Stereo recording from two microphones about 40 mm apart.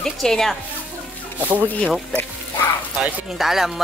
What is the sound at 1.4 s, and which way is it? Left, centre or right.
Speech, right.